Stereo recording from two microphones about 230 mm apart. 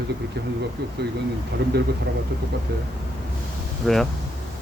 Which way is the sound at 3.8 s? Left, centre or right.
Centre.